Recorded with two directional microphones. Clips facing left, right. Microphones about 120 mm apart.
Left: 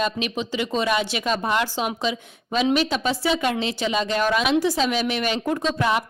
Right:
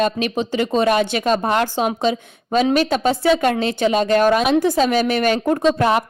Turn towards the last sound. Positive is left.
turn(degrees=-50)  # may be behind; listen again after turning